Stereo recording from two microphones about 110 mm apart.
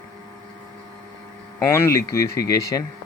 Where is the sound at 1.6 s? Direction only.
25° left (ahead or behind).